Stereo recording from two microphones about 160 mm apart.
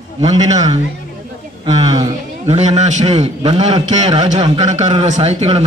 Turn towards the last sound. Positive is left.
turn(degrees=-40)  # may be behind; listen again after turning